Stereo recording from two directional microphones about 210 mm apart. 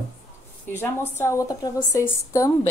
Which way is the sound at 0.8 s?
10° left (ahead or behind).